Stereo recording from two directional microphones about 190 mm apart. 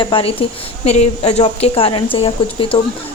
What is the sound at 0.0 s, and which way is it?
A woman's voice, 25° left (ahead or behind).